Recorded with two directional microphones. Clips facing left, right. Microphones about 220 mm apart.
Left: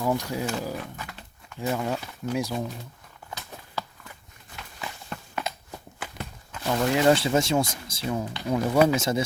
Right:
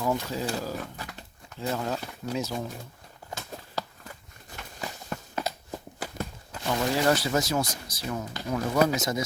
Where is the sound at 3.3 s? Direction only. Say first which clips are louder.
Right 2 dB; 40° right (ahead or behind).